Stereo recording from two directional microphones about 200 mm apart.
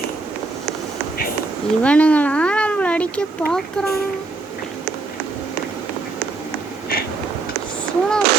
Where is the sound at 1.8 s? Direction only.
5° left (ahead or behind).